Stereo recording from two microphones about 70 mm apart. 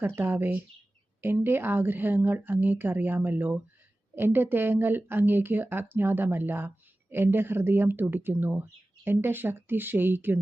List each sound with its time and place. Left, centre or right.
0.2 s a woman's voice: right